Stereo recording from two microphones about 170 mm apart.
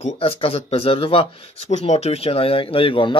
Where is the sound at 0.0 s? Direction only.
35° left (ahead or behind).